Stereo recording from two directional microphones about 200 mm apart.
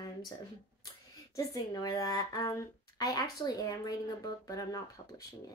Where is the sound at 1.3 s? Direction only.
20° left (ahead or behind).